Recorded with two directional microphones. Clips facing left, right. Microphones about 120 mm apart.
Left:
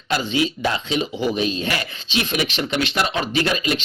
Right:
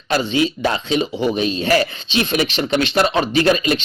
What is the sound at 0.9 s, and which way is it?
Speech, 40° right (ahead or behind).